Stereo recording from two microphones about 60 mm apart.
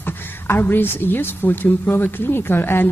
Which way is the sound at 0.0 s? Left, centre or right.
Left.